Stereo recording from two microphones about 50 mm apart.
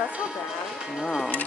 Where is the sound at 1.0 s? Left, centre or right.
Centre.